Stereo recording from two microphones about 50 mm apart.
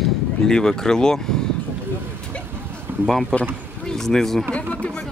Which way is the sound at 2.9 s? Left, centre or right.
Right.